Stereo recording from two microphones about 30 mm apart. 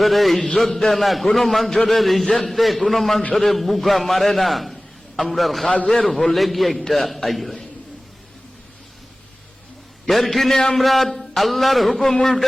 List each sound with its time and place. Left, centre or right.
0.0 s a man's voice: centre
5.9 s a man's voice: centre
6.3 s a man's voice: centre
10.1 s a man's voice: centre
10.5 s a man's voice: centre
10.8 s a man's voice: centre
11.9 s a man's voice: centre